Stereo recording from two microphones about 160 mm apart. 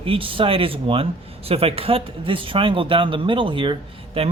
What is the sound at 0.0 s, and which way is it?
Speech, 35° right (ahead or behind).